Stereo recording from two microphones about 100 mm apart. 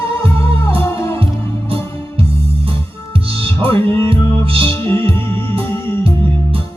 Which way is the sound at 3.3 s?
65° right (ahead or behind).